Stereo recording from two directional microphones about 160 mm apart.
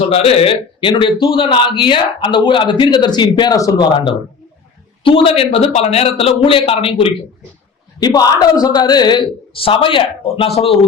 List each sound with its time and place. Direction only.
0.1 s a man's voice: 35° left (ahead or behind)
7.9 s a man's voice: 25° left (ahead or behind)